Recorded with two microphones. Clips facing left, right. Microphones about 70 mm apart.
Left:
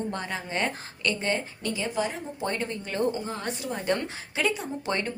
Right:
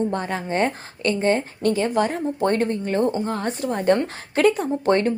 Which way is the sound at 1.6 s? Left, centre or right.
Right.